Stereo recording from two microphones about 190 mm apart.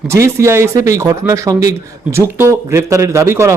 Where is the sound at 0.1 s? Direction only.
15° right (ahead or behind).